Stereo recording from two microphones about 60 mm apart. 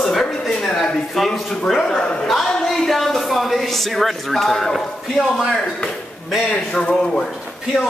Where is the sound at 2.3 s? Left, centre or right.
Centre.